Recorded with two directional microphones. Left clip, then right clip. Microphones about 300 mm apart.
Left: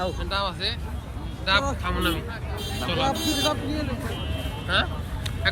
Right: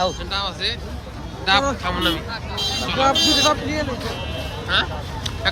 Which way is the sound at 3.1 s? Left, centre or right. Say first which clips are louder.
Right 12 dB; right.